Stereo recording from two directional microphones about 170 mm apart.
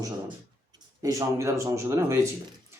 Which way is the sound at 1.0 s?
15° right (ahead or behind).